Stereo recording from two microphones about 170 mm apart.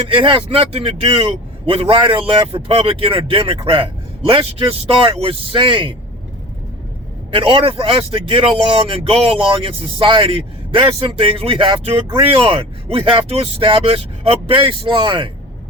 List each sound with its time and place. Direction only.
0.1 s speech: 30° right (ahead or behind)
7.3 s speech: 30° right (ahead or behind)